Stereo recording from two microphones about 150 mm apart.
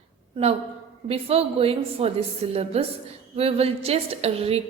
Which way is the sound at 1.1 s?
40° right (ahead or behind).